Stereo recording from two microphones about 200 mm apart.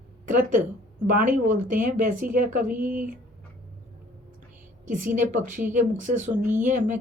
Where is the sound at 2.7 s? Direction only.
10° right (ahead or behind).